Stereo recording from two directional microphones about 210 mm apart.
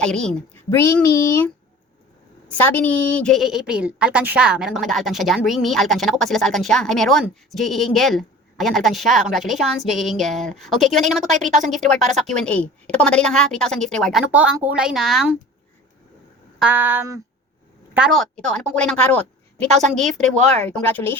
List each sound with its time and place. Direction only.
0.0 s speech: 5° left (ahead or behind)
2.6 s a woman's voice: 10° left (ahead or behind)
11.3 s speech: 35° right (ahead or behind)
11.7 s a woman's voice: centre (ahead or behind)
16.6 s a sound: 10° right (ahead or behind)
17.9 s a woman's voice: centre (ahead or behind)
20.3 s speech: 30° right (ahead or behind)
20.7 s speech: 10° left (ahead or behind)